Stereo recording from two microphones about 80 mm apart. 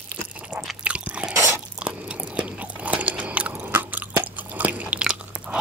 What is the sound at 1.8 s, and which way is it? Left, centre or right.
Biting, centre.